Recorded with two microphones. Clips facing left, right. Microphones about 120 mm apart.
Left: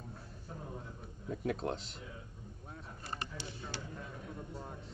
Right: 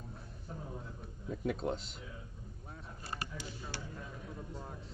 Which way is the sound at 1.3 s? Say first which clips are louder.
Even; centre (ahead or behind).